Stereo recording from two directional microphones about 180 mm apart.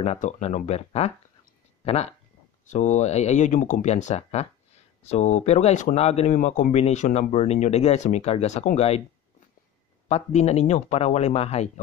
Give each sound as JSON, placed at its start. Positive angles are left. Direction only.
{"t": 0.0, "sound": "speech", "side_deg": 35}
{"t": 2.6, "sound": "speech", "side_deg": 40}
{"t": 10.0, "sound": "speech", "side_deg": 35}